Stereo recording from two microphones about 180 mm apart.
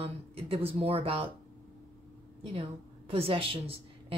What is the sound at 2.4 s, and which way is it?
A woman's voice, 30° right (ahead or behind).